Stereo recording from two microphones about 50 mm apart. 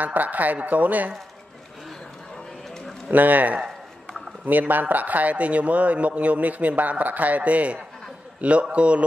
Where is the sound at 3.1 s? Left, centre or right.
Right.